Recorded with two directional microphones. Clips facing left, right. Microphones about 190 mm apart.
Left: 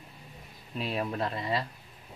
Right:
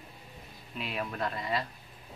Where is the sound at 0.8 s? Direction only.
35° left (ahead or behind).